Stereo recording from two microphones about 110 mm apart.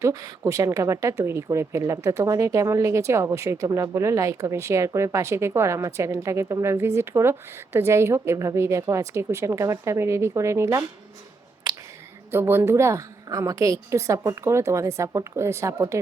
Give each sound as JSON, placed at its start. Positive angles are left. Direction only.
{"t": 0.0, "sound": "speech", "side_deg": -30}
{"t": 12.3, "sound": "speech", "side_deg": -20}